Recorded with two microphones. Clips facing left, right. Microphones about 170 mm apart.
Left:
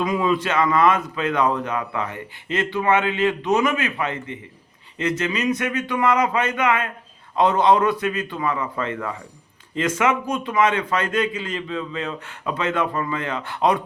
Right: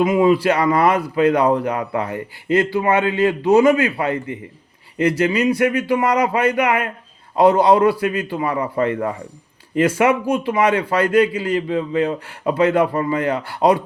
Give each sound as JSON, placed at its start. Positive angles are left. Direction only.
{"t": 0.0, "sound": "a man's voice", "side_deg": -25}